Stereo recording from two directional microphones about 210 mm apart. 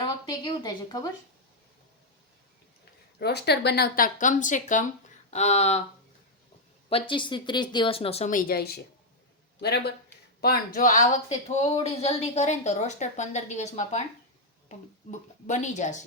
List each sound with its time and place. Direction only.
0.0 s speech: 20° left (ahead or behind)
3.2 s speech: 50° left (ahead or behind); by 5.8 s 30° left (ahead or behind)
6.9 s speech: 25° left (ahead or behind)